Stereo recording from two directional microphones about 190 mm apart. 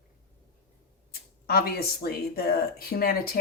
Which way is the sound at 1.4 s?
55° left (ahead or behind).